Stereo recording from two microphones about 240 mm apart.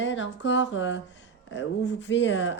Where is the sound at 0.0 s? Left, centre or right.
Left.